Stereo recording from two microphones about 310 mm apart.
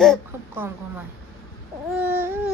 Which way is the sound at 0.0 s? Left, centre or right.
Centre.